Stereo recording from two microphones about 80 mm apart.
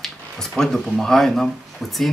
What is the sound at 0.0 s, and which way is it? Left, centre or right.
Speech, centre.